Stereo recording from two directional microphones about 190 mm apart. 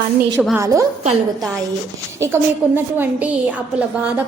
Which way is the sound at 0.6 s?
15° right (ahead or behind).